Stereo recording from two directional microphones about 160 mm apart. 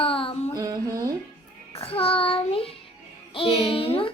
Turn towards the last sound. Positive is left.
turn(degrees=35)  # may be behind; listen again after turning